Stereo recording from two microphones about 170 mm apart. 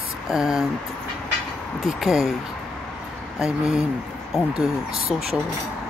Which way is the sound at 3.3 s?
5° right (ahead or behind).